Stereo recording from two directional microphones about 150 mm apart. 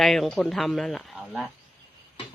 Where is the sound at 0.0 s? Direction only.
Centre (ahead or behind).